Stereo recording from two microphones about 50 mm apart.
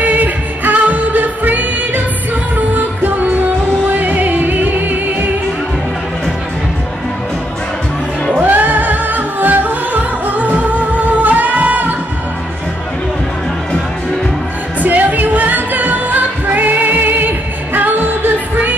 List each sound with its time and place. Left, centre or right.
0.0 s music: right
2.7 s music: right
8.4 s music: right
14.8 s music: right